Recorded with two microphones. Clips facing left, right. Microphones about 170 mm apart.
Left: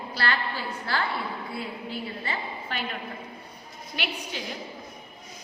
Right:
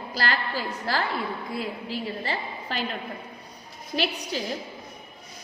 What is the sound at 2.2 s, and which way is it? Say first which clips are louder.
Speech: right 2 dB; 35° right (ahead or behind).